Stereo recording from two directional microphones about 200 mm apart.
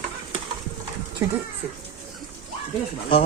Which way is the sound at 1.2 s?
15° right (ahead or behind).